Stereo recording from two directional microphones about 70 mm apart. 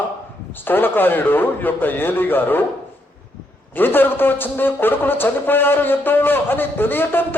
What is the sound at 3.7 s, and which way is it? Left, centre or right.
A man's voice, left.